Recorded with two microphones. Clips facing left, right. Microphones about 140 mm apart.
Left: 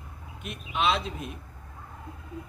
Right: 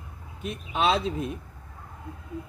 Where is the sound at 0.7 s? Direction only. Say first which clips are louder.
Right 2 dB; 35° right (ahead or behind).